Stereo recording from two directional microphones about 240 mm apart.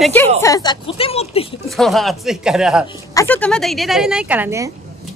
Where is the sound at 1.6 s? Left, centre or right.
Centre.